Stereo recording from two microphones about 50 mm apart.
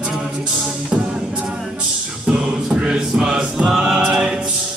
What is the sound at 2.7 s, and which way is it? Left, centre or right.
Chant, centre.